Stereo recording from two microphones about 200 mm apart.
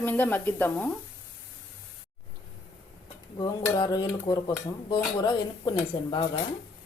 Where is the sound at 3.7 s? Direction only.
20° left (ahead or behind).